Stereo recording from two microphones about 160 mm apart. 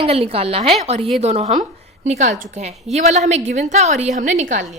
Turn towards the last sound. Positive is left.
turn(degrees=-50)  # may be behind; listen again after turning